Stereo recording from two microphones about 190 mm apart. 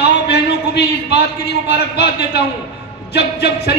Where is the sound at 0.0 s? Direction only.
60° left (ahead or behind).